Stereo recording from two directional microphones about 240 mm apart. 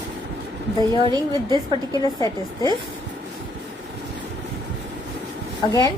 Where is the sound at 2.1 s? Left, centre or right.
Centre.